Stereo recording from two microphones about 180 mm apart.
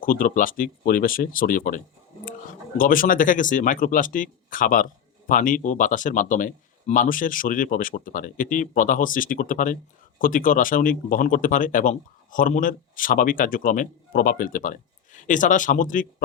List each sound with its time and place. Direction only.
0.0 s speech: 50° left (ahead or behind)